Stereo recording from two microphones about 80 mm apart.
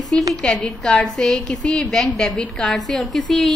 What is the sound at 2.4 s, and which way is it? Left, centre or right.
A woman's voice, centre.